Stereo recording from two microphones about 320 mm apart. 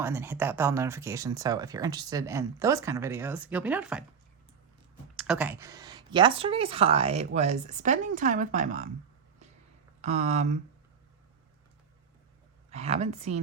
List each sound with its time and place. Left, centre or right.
0.0 s speech: centre
5.1 s speech: centre; by 8.9 s right
10.0 s speech: right
12.7 s speech: centre